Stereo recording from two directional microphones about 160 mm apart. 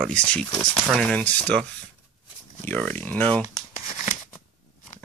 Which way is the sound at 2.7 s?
10° left (ahead or behind).